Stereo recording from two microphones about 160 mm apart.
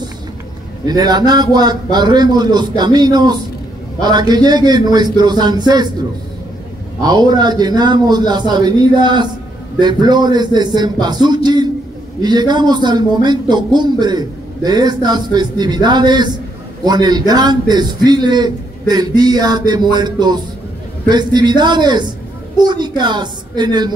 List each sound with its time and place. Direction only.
0.8 s a man's voice: 25° right (ahead or behind)
7.1 s a man's voice: 25° right (ahead or behind)